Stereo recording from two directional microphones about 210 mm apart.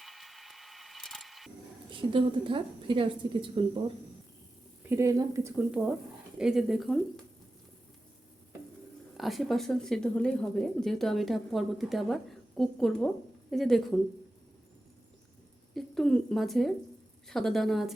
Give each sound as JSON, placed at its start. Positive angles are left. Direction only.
{"t": 0.0, "sound": "a sound", "side_deg": 0}
{"t": 1.9, "sound": "a woman's voice", "side_deg": -25}
{"t": 4.9, "sound": "a woman's voice", "side_deg": -15}
{"t": 6.3, "sound": "a woman's voice", "side_deg": 0}
{"t": 9.1, "sound": "a woman's voice", "side_deg": 0}
{"t": 15.7, "sound": "a woman's voice", "side_deg": 5}